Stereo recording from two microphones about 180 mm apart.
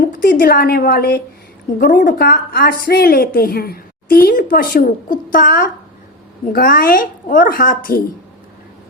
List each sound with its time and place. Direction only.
0.0 s a woman's voice: 50° left (ahead or behind)